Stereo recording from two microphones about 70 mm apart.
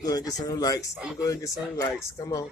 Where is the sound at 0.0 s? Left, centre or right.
Left.